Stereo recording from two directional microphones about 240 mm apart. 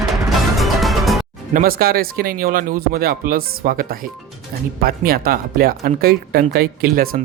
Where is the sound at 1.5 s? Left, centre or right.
Right.